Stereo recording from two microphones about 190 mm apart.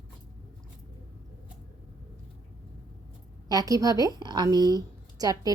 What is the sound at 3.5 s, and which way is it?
A woman's voice, 20° right (ahead or behind).